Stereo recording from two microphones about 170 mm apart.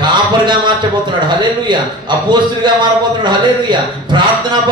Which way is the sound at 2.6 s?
25° right (ahead or behind).